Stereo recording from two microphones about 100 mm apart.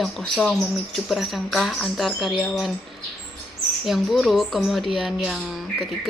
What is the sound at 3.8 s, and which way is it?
Speech, centre (ahead or behind).